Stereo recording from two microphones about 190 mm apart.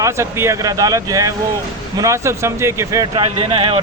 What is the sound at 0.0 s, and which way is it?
A man's voice, 15° right (ahead or behind).